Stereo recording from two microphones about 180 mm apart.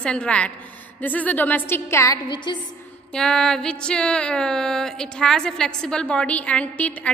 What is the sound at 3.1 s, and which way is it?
A woman's voice, 5° left (ahead or behind).